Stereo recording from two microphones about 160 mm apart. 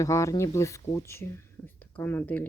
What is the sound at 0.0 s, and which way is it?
Speech, 20° left (ahead or behind).